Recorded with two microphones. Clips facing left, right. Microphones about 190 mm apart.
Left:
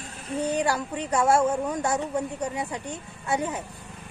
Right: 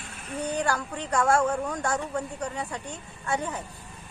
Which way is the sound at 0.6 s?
10° left (ahead or behind).